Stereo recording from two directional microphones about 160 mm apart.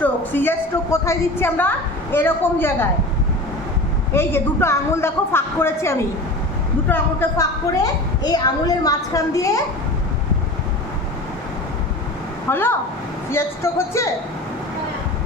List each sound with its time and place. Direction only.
0.0 s a woman's voice: 10° left (ahead or behind)
4.1 s a woman's voice: 15° left (ahead or behind)
8.2 s a woman's voice: 25° left (ahead or behind)
12.5 s a woman's voice: 15° left (ahead or behind)